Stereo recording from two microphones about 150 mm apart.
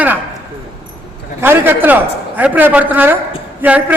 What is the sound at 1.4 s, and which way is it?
A man's voice, 15° right (ahead or behind).